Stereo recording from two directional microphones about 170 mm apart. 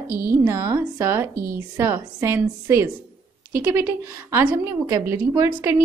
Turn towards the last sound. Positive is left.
turn(degrees=-15)  # may be behind; listen again after turning